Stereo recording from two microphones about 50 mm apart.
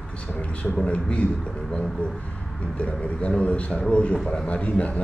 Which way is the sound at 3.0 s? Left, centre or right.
Left.